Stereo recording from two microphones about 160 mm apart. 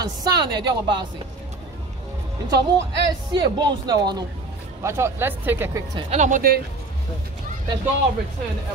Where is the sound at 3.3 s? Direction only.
25° right (ahead or behind).